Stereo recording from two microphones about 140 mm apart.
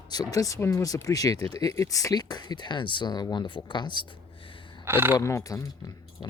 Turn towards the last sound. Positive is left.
turn(degrees=25)  # may be behind; listen again after turning